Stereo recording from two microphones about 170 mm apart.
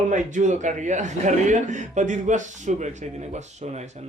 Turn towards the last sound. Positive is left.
turn(degrees=-40)  # may be behind; listen again after turning